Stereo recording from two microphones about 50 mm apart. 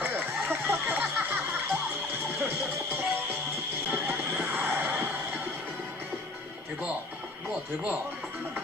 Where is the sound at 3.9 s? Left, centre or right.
Right.